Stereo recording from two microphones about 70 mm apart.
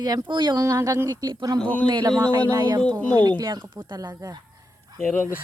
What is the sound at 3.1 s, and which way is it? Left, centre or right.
Speech, right.